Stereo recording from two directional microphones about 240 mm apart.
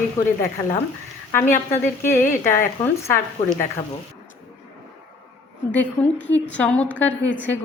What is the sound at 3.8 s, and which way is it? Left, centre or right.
Speech, left.